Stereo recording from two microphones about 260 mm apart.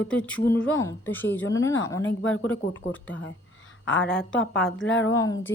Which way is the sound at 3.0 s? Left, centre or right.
Left.